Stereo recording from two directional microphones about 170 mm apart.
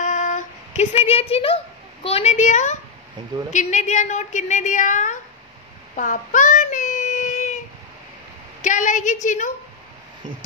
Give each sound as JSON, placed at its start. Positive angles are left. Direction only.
{"t": 0.0, "sound": "a sound", "side_deg": 45}
{"t": 2.0, "sound": "a woman's voice", "side_deg": 40}
{"t": 5.9, "sound": "child singing", "side_deg": 50}
{"t": 8.6, "sound": "a woman's voice", "side_deg": 45}